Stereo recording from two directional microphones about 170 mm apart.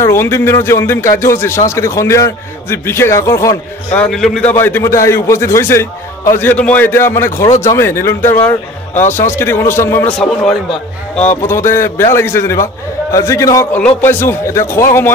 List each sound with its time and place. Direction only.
0.0 s speech: 15° left (ahead or behind)
4.0 s speech: centre (ahead or behind)
10.1 s a man's voice: 5° left (ahead or behind)
11.4 s speech: 15° left (ahead or behind)